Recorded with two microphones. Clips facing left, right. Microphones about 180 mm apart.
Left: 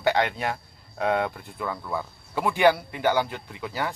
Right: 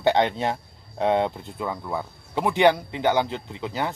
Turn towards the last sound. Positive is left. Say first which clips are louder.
# right 2 dB
turn(degrees=-20)  # may be behind; listen again after turning